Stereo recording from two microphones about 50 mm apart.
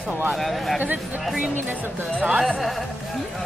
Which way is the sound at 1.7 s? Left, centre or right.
Right.